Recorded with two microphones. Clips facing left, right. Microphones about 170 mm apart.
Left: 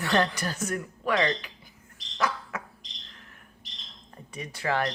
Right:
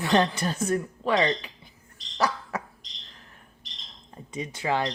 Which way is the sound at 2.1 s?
35° right (ahead or behind).